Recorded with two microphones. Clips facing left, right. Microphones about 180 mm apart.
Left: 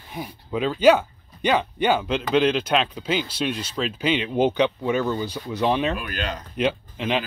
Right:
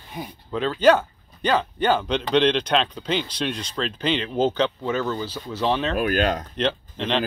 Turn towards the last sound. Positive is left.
turn(degrees=10)  # may be behind; listen again after turning